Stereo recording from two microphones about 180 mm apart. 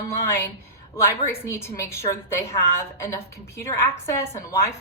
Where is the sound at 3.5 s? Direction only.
15° left (ahead or behind).